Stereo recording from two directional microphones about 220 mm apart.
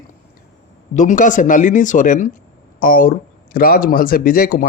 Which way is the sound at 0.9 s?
35° left (ahead or behind).